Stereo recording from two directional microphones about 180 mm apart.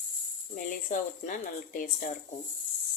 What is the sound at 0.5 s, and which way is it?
Speech, 45° left (ahead or behind).